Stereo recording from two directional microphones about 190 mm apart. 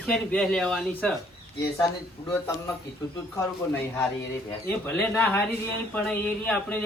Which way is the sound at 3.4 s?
10° left (ahead or behind).